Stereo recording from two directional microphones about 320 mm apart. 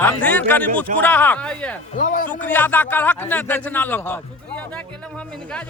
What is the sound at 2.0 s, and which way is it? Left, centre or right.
Speech, left.